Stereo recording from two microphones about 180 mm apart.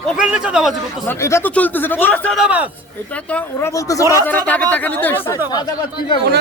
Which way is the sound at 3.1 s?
10° left (ahead or behind).